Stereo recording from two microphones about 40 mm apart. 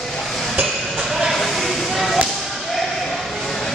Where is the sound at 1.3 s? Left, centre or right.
Centre.